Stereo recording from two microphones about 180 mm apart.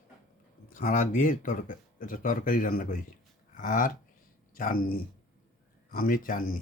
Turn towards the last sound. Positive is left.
turn(degrees=50)  # may be behind; listen again after turning